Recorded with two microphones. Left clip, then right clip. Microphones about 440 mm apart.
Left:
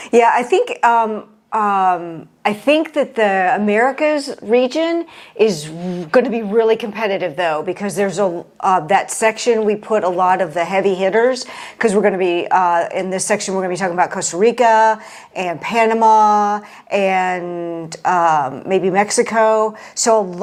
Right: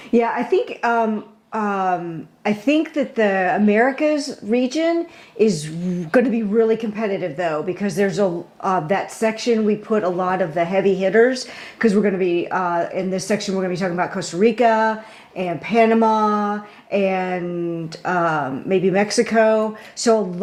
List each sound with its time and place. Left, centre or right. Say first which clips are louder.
0.1 s a woman's voice: left 6 dB; left